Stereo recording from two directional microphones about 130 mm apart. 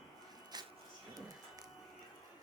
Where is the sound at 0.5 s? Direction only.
30° right (ahead or behind).